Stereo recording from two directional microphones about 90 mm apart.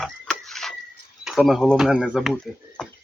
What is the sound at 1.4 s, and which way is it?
Speech, 5° left (ahead or behind).